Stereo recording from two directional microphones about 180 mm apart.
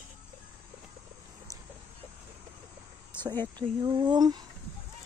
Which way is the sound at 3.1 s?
10° left (ahead or behind).